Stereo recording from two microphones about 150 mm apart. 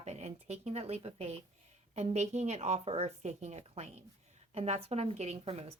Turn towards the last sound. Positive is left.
turn(degrees=-45)  # may be behind; listen again after turning